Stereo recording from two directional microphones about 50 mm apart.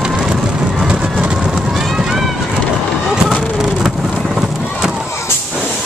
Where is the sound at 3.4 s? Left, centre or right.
Centre.